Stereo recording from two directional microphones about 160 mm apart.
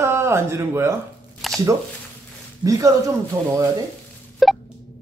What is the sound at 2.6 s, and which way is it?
Speech, 20° right (ahead or behind).